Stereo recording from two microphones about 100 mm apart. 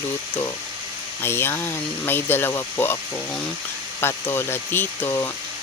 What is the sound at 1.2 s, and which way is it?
Speech, 25° left (ahead or behind).